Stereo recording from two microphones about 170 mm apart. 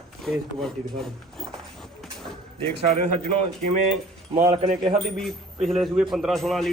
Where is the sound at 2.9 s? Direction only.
40° right (ahead or behind).